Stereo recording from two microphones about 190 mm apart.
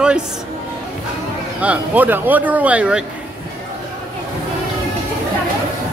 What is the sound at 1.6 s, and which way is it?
Speech, 10° right (ahead or behind).